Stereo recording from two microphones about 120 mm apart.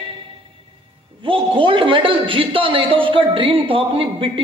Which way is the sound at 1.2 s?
45° right (ahead or behind).